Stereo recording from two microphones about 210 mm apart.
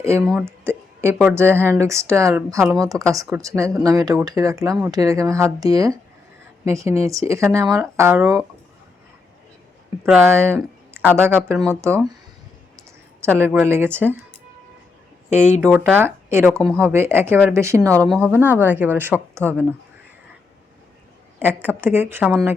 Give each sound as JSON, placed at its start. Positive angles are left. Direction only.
{"t": 0.0, "sound": "speech", "side_deg": -15}
{"t": 10.0, "sound": "speech", "side_deg": -10}
{"t": 13.3, "sound": "speech", "side_deg": -10}
{"t": 15.3, "sound": "speech", "side_deg": -10}
{"t": 21.3, "sound": "speech", "side_deg": -10}